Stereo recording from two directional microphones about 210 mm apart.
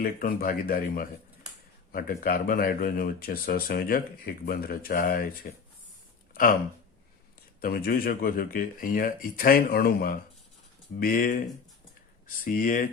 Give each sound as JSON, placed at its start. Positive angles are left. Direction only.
{"t": 0.0, "sound": "speech", "side_deg": 45}
{"t": 7.6, "sound": "speech", "side_deg": 45}
{"t": 12.5, "sound": "speech", "side_deg": 40}